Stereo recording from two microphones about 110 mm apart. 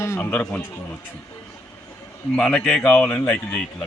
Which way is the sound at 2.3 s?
5° left (ahead or behind).